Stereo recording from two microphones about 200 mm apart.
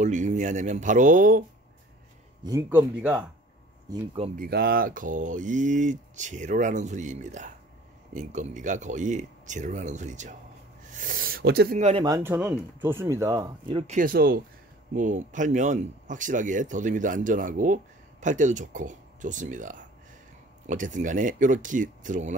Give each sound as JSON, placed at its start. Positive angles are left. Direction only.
{"t": 0.0, "sound": "speech", "side_deg": -40}
{"t": 2.4, "sound": "speech", "side_deg": -15}
{"t": 3.9, "sound": "speech", "side_deg": -20}
{"t": 4.4, "sound": "speech", "side_deg": -50}
{"t": 10.9, "sound": "a sound", "side_deg": -40}
{"t": 12.0, "sound": "speech", "side_deg": -15}
{"t": 13.9, "sound": "speech", "side_deg": -45}